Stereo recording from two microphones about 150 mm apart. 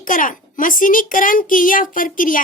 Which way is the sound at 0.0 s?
60° left (ahead or behind).